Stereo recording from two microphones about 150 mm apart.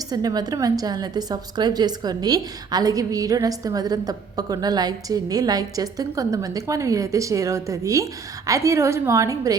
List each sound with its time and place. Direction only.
0.1 s a woman's voice: 25° right (ahead or behind)